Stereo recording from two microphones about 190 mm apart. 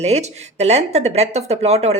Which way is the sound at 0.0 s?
35° right (ahead or behind).